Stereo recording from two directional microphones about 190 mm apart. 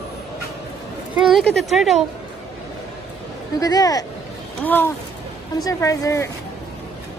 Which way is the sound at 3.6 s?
20° left (ahead or behind).